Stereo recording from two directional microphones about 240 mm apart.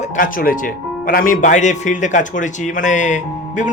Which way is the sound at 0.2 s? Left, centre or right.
Left.